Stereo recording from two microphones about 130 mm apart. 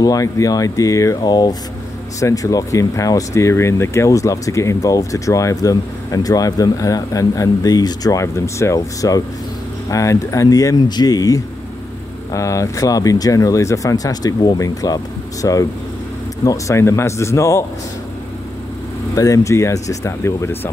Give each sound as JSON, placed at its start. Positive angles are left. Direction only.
{"t": 0.0, "sound": "speech", "side_deg": 25}
{"t": 19.1, "sound": "speech", "side_deg": 25}